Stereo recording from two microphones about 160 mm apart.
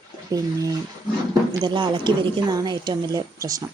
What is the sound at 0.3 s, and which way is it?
Speech, 20° right (ahead or behind).